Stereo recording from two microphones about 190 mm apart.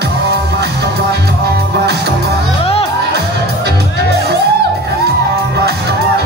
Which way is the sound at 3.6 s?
60° right (ahead or behind).